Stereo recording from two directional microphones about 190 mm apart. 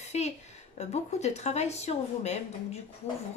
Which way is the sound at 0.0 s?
35° left (ahead or behind).